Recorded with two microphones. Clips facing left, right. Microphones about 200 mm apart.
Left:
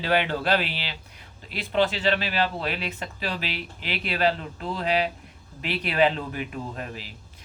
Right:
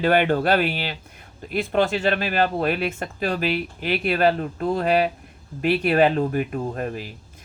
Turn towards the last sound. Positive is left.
turn(degrees=-50)  # may be behind; listen again after turning